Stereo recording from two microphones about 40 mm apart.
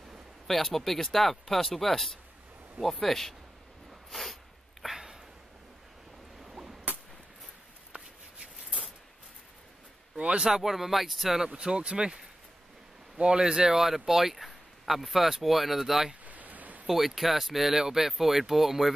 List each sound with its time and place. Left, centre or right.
0.5 s speech: centre
4.1 s a sound: centre
6.4 s a sound: centre
10.1 s speech: right
10.5 s speech: centre
11.4 s speech: right
13.2 s speech: right
16.3 s a sound: right
16.8 s speech: centre